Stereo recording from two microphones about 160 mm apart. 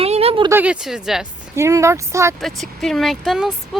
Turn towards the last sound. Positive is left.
turn(degrees=0)  # may be behind; listen again after turning